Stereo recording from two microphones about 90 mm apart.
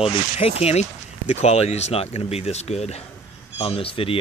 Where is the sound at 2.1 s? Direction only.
90° left.